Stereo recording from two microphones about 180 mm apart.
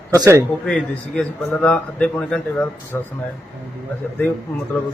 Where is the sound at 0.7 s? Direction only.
5° left (ahead or behind).